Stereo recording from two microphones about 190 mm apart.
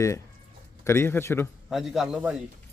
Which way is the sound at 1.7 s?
Centre (ahead or behind).